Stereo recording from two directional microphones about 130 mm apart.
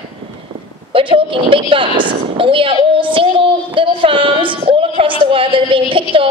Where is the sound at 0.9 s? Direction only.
40° right (ahead or behind).